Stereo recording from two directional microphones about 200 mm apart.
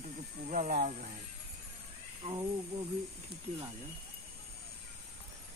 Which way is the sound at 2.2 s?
20° right (ahead or behind).